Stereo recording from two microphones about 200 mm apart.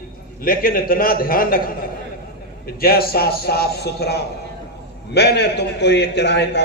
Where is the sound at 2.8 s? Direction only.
50° left (ahead or behind).